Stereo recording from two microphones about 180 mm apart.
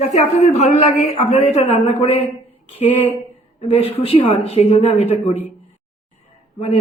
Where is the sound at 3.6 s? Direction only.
30° left (ahead or behind).